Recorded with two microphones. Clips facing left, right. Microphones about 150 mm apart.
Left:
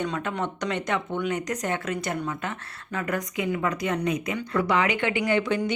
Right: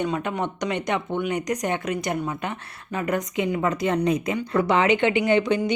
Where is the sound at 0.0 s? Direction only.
15° right (ahead or behind).